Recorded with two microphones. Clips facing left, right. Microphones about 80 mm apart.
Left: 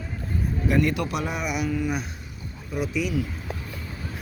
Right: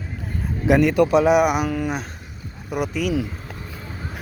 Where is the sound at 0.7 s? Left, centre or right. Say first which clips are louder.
Right 9 dB; right.